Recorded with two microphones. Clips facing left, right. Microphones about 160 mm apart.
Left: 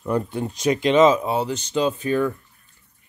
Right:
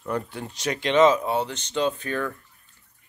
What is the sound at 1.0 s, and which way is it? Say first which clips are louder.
Speech: left 2 dB; 5° left (ahead or behind).